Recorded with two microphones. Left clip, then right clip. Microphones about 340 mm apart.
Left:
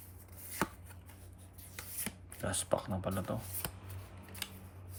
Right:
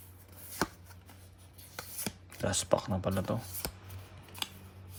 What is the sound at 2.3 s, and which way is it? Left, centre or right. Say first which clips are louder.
Speech: right 5 dB; centre.